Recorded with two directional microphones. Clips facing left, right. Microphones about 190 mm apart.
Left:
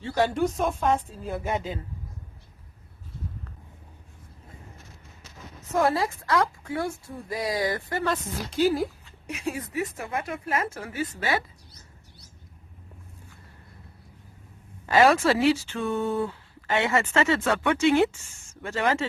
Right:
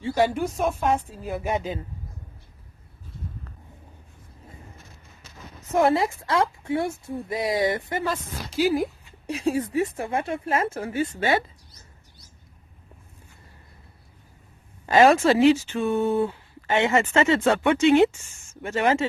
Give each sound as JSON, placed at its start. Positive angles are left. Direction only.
{"t": 0.0, "sound": "a woman's voice", "side_deg": -10}
{"t": 5.7, "sound": "a woman's voice", "side_deg": -20}
{"t": 8.0, "sound": "a woman's voice", "side_deg": -5}
{"t": 9.2, "sound": "a woman's voice", "side_deg": -30}
{"t": 14.8, "sound": "a woman's voice", "side_deg": -25}